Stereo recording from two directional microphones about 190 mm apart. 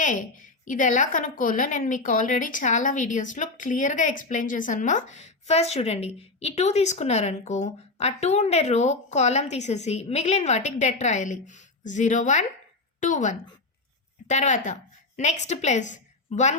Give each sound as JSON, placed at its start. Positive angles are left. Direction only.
{"t": 0.0, "sound": "a woman's voice", "side_deg": 45}